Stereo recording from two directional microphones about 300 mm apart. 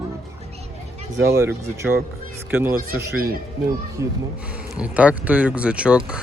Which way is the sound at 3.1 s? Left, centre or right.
Right.